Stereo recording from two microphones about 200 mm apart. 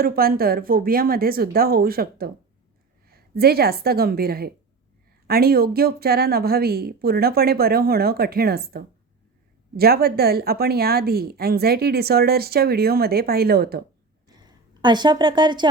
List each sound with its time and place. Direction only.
0.0 s a woman's voice: 50° right (ahead or behind)
14.4 s a woman's voice: 20° right (ahead or behind)